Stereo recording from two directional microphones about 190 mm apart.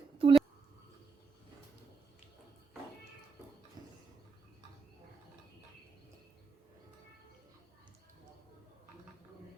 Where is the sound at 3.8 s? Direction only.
20° right (ahead or behind).